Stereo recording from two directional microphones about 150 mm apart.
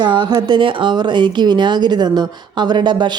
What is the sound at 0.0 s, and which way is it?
Speech, 30° right (ahead or behind).